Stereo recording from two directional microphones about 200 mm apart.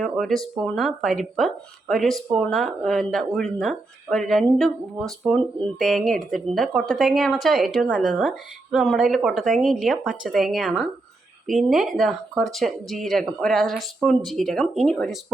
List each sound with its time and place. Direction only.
0.0 s speech: centre (ahead or behind)